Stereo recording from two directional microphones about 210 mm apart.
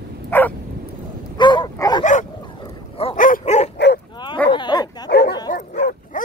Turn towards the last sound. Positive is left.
turn(degrees=40)  # may be behind; listen again after turning